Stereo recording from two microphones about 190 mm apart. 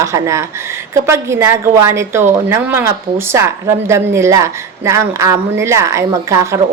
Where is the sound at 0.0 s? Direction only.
15° right (ahead or behind).